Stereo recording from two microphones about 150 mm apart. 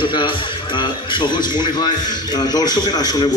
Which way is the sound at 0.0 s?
30° left (ahead or behind).